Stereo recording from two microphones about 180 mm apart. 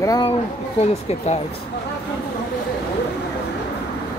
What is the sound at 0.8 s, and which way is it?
Speech, 35° left (ahead or behind).